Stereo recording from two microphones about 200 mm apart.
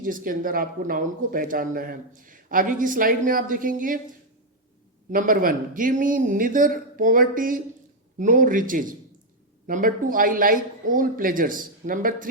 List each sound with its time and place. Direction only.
0.0 s speech: 45° right (ahead or behind)
5.1 s a man's voice: 45° right (ahead or behind)